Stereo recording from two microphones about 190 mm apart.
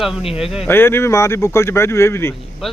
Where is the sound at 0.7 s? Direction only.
10° left (ahead or behind).